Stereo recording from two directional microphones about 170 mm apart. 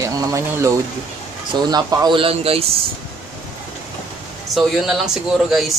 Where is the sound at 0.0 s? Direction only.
20° right (ahead or behind); by 2.7 s 35° right (ahead or behind).